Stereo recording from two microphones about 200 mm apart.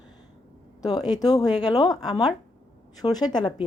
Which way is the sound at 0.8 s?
20° left (ahead or behind).